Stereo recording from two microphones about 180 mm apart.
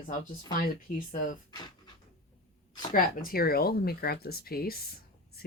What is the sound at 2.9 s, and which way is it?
Speech, 50° left (ahead or behind).